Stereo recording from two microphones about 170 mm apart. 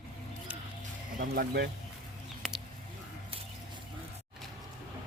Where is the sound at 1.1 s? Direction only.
60° right (ahead or behind).